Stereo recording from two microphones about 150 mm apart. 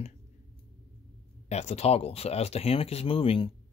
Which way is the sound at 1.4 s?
45° left (ahead or behind).